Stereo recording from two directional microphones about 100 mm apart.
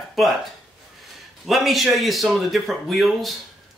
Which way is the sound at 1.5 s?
Centre (ahead or behind).